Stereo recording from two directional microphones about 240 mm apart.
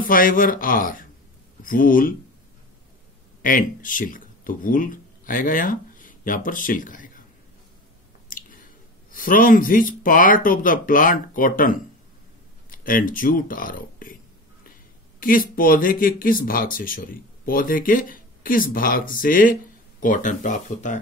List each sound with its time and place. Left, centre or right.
0.0 s speech: left
3.4 s speech: left
8.3 s squish: left
9.1 s speech: left
15.1 s speech: left